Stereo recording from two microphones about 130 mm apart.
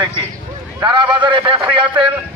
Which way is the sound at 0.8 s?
35° right (ahead or behind).